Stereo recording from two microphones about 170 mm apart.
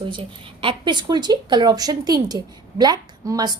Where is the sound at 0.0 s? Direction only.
30° right (ahead or behind).